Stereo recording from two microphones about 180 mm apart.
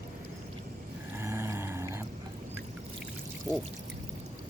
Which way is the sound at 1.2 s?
15° right (ahead or behind).